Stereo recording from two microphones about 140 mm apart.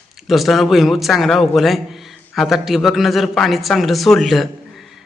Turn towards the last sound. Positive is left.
turn(degrees=0)  # may be behind; listen again after turning